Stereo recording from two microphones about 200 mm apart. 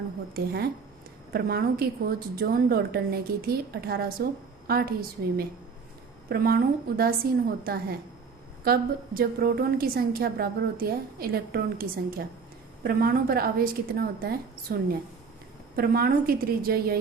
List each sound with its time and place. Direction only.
0.3 s a woman's voice: 55° right (ahead or behind)